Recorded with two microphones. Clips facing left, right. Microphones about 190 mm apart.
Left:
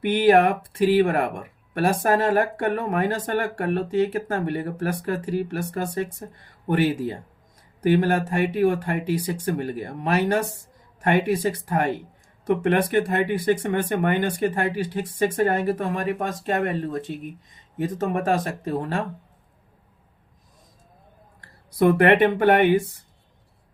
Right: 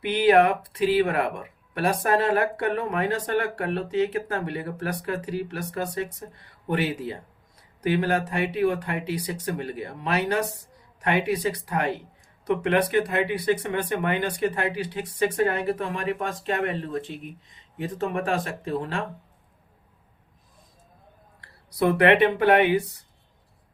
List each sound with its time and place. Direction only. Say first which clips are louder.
0.0 s speech: left 2 dB; 50° left (ahead or behind)
21.8 s speech: left 2 dB; 45° left (ahead or behind)